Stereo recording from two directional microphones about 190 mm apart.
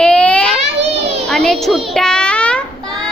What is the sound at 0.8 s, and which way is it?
Children playing, 35° right (ahead or behind).